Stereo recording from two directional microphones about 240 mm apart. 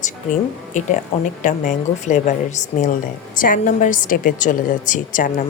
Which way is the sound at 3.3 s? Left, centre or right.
Left.